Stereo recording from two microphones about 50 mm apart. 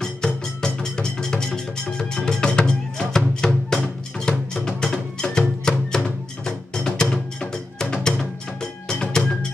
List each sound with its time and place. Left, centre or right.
0.0 s music: centre